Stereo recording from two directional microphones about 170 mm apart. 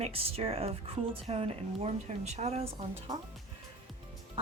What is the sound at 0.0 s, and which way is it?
A woman's voice, 35° right (ahead or behind).